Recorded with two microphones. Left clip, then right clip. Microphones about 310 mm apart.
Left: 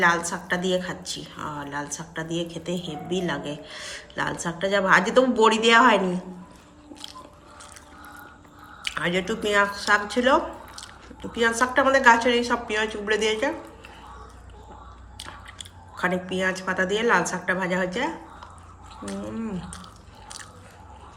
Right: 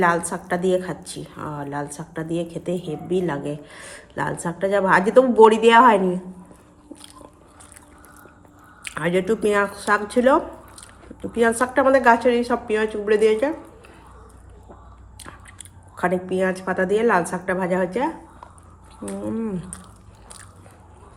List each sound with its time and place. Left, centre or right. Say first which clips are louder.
0.3 s a woman's voice: right 4 dB; centre
6.9 s biting: left 3 dB; centre
8.8 s a woman's voice: right 3 dB; centre
15.2 s speech: left 3 dB; centre
19.0 s a sound: right 5 dB; centre